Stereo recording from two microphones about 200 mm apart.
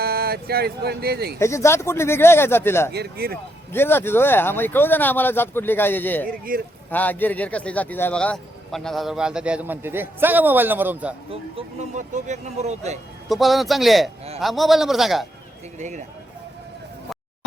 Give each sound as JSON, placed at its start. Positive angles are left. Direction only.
{"t": 0.0, "sound": "speech", "side_deg": -50}
{"t": 1.4, "sound": "speech", "side_deg": 15}
{"t": 2.9, "sound": "speech", "side_deg": -50}
{"t": 3.7, "sound": "speech", "side_deg": 10}
{"t": 6.2, "sound": "speech", "side_deg": -45}
{"t": 6.9, "sound": "a man's voice", "side_deg": 10}
{"t": 11.3, "sound": "speech", "side_deg": -30}
{"t": 13.2, "sound": "a man's voice", "side_deg": 0}
{"t": 15.8, "sound": "speech", "side_deg": -35}